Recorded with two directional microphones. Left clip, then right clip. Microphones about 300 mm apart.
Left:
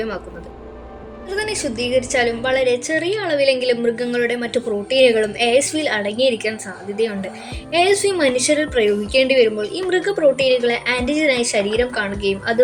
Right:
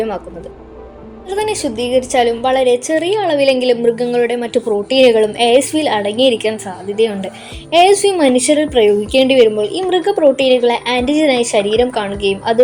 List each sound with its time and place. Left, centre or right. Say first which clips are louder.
1.4 s a woman's voice: right 5 dB; centre